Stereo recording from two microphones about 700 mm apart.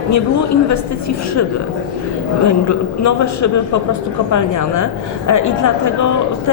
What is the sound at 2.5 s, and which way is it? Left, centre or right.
Speech, left.